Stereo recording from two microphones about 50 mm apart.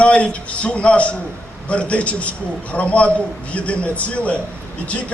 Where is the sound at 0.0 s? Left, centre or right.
Left.